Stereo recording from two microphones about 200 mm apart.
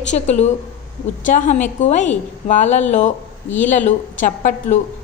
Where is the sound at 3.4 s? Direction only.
10° left (ahead or behind).